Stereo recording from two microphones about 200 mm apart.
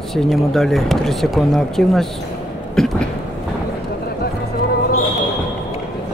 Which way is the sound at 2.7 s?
5° left (ahead or behind).